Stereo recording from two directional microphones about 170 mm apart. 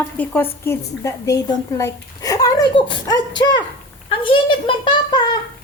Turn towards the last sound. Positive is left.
turn(degrees=25)  # may be behind; listen again after turning